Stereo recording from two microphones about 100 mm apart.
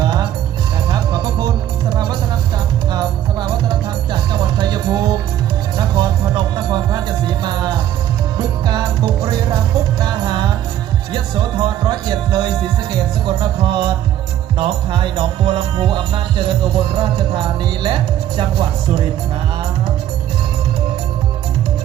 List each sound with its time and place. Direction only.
0.0 s music: 45° right (ahead or behind)